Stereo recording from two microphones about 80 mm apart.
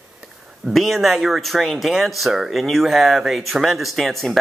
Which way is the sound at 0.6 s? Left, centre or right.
Centre.